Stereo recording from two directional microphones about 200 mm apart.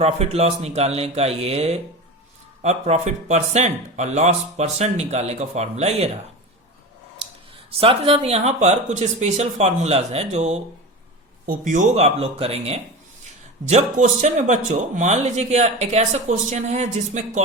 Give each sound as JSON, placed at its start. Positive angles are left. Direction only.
{"t": 0.0, "sound": "speech", "side_deg": -30}
{"t": 7.7, "sound": "speech", "side_deg": -30}